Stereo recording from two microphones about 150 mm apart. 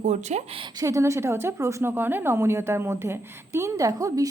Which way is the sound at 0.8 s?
20° right (ahead or behind).